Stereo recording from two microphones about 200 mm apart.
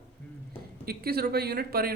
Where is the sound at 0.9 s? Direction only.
50° right (ahead or behind).